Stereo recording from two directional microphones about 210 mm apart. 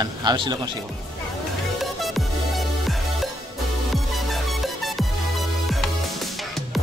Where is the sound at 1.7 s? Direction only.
Centre (ahead or behind).